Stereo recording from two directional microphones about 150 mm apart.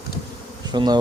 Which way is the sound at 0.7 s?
30° right (ahead or behind).